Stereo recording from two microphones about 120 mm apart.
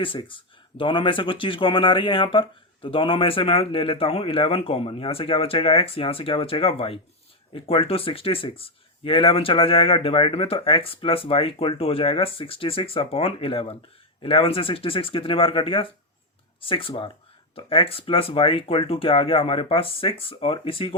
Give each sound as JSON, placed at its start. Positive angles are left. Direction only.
{"t": 0.0, "sound": "speech", "side_deg": 45}